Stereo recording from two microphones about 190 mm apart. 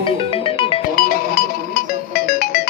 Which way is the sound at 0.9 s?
50° left (ahead or behind).